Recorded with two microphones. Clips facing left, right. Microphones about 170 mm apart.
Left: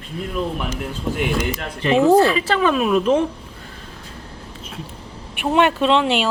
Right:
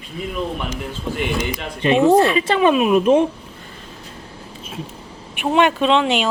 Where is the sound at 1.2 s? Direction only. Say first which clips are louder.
Left 1 dB; 5° left (ahead or behind).